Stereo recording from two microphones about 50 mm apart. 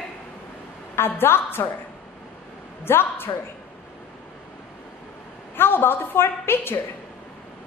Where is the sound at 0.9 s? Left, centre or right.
Left.